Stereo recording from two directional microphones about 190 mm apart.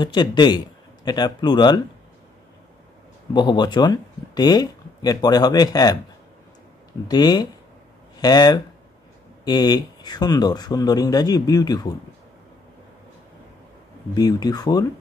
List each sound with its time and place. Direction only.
0.0 s speech: 25° left (ahead or behind)
3.3 s speech: 25° left (ahead or behind)
7.1 s speech: 20° left (ahead or behind)
14.1 s speech: 20° left (ahead or behind)